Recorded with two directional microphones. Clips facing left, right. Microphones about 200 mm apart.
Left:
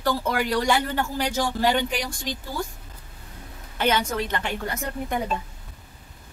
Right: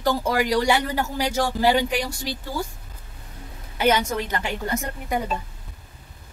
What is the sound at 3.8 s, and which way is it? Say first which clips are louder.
A woman's voice: right 2 dB; 10° right (ahead or behind).